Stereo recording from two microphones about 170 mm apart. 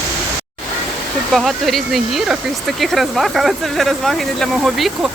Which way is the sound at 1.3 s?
Centre (ahead or behind).